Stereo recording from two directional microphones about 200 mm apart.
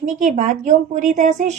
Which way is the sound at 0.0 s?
40° right (ahead or behind).